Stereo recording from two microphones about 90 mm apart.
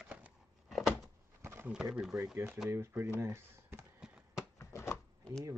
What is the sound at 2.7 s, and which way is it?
Speech, 30° right (ahead or behind).